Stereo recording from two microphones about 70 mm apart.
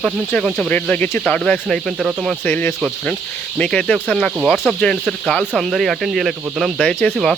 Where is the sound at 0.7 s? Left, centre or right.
Left.